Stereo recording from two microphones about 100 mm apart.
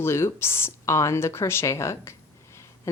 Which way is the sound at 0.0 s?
25° left (ahead or behind).